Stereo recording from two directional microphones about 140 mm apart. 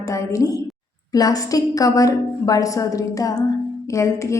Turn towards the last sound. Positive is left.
turn(degrees=20)  # may be behind; listen again after turning